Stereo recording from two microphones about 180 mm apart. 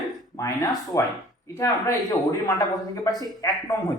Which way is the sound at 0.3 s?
15° left (ahead or behind).